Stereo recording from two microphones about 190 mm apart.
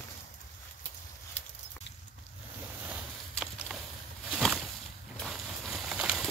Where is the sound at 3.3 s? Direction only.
Centre (ahead or behind).